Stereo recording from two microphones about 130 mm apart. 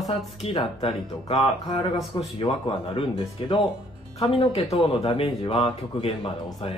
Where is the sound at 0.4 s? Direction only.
50° left (ahead or behind).